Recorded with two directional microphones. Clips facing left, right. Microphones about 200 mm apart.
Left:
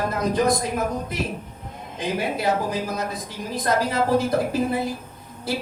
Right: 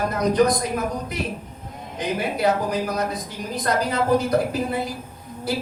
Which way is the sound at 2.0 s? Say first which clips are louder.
Right 2 dB; 25° left (ahead or behind).